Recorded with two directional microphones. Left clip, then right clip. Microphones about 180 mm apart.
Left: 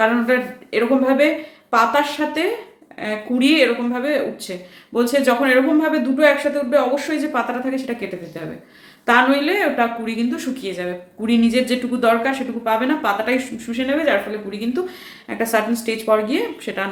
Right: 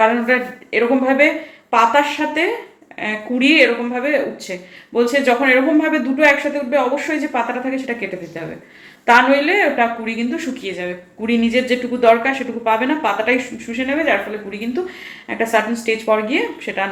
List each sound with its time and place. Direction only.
0.0 s a woman's voice: 15° left (ahead or behind)
9.0 s a woman's voice: 15° left (ahead or behind)